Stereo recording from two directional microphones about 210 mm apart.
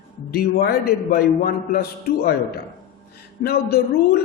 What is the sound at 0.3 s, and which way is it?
A man's voice, 45° left (ahead or behind).